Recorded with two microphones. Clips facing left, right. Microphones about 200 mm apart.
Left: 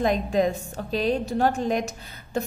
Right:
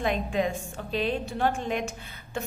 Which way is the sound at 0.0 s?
40° left (ahead or behind).